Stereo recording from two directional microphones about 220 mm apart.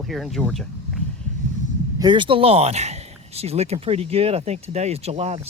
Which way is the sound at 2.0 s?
20° right (ahead or behind).